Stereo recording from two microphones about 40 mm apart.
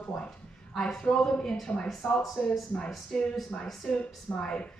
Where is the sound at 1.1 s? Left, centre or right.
Centre.